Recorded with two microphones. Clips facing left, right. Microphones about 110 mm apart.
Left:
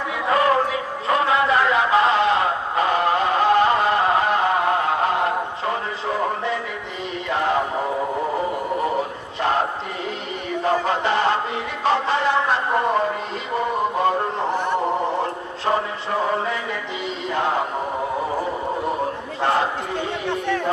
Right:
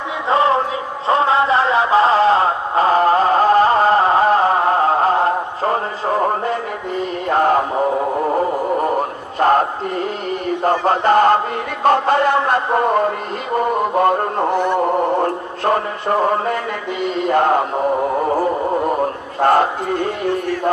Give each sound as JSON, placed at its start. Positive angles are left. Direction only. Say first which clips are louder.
{"t": 0.3, "sound": "music", "louder": "right 3 dB", "side_deg": -25}
{"t": 8.8, "sound": "music", "louder": "right 4 dB", "side_deg": -50}
{"t": 10.6, "sound": "chant", "louder": "right 4 dB", "side_deg": -45}
{"t": 11.8, "sound": "music", "louder": "right 6 dB", "side_deg": -50}
{"t": 13.6, "sound": "a man's voice", "louder": "right 5 dB", "side_deg": -55}
{"t": 19.4, "sound": "speech", "louder": "right 7 dB", "side_deg": -50}